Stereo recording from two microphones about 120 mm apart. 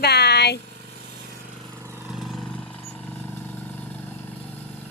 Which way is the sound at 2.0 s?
Centre (ahead or behind).